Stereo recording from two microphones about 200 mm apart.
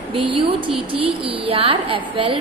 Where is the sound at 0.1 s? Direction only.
25° right (ahead or behind).